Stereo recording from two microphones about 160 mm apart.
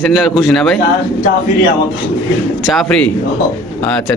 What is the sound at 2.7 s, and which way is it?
Speech, 5° left (ahead or behind).